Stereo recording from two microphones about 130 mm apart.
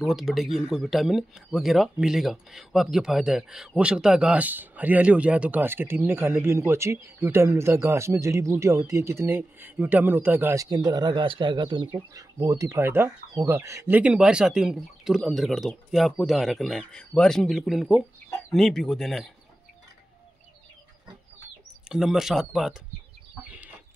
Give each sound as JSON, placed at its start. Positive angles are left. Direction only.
{"t": 0.0, "sound": "speech", "side_deg": 0}
{"t": 12.1, "sound": "speech", "side_deg": -25}
{"t": 13.9, "sound": "speech", "side_deg": -5}
{"t": 21.8, "sound": "speech", "side_deg": -5}